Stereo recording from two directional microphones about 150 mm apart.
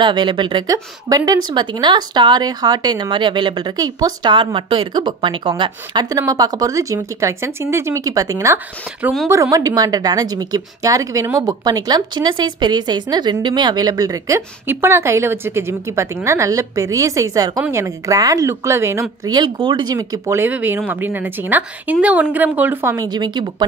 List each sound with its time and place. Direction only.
0.0 s a woman's voice: 30° right (ahead or behind); by 22.9 s 15° right (ahead or behind)
22.9 s a woman's voice: 30° right (ahead or behind)